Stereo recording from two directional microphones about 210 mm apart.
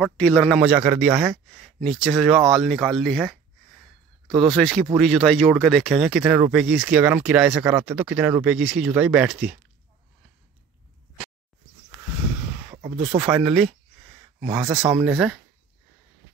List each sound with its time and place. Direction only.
0.0 s speech: centre (ahead or behind)
4.3 s speech: 20° right (ahead or behind)
4.6 s speech: 5° left (ahead or behind)
12.7 s speech: 30° right (ahead or behind)
13.3 s speech: 5° right (ahead or behind)